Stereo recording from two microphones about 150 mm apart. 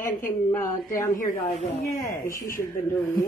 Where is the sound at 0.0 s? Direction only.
15° left (ahead or behind).